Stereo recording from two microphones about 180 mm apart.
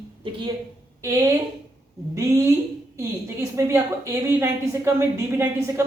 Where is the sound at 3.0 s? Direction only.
15° right (ahead or behind).